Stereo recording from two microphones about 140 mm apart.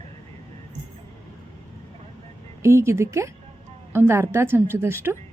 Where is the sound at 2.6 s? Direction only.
20° right (ahead or behind).